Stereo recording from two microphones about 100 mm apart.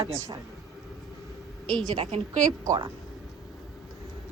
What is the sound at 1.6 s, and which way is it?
Speech, 5° left (ahead or behind).